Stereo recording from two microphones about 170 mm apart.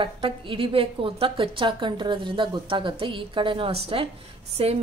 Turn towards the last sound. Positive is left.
turn(degrees=-35)  # may be behind; listen again after turning